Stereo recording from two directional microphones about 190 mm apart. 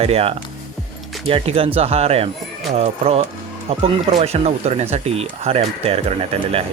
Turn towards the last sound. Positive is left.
turn(degrees=-30)  # may be behind; listen again after turning